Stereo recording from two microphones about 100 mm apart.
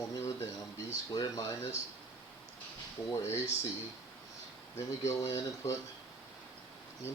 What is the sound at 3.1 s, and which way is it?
Speech, 30° left (ahead or behind).